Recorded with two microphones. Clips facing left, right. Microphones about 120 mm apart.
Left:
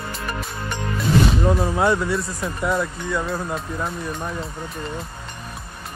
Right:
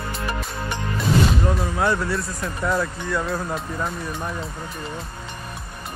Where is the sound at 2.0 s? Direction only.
Centre (ahead or behind).